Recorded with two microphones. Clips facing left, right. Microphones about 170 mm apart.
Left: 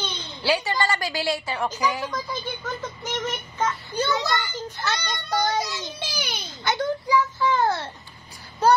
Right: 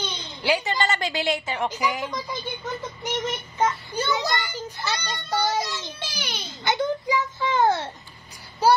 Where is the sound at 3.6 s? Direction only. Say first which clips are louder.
Right 1 dB; 15° right (ahead or behind).